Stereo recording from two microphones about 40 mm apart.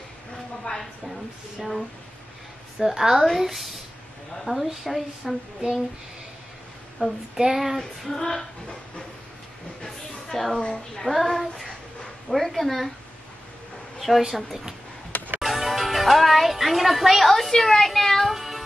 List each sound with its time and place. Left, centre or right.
1.6 s a child's voice: centre
4.5 s a woman's voice: right
4.8 s speech: centre
7.0 s a woman's voice: right
7.3 s a child's voice: centre
8.1 s speech: centre
9.8 s speech: centre
13.9 s speech: centre
18.3 s music: centre